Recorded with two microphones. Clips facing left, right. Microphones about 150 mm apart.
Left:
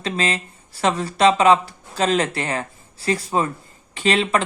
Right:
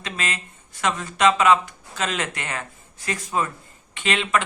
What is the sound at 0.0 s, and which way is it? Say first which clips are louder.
Speech: left 7 dB; 30° left (ahead or behind).